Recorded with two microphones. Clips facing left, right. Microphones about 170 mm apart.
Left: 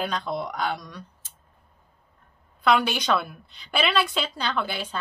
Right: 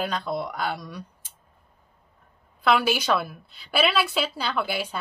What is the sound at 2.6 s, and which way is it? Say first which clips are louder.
A woman's voice: even; 5° right (ahead or behind).